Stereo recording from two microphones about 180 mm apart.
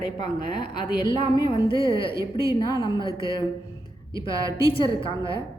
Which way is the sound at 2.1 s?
20° right (ahead or behind).